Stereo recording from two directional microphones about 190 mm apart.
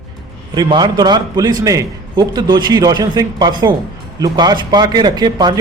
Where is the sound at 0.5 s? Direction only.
25° right (ahead or behind).